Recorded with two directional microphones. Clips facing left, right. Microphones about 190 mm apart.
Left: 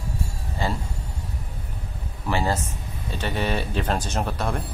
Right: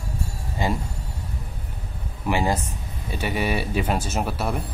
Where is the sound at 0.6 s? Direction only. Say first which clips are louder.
Right 2 dB; 15° right (ahead or behind).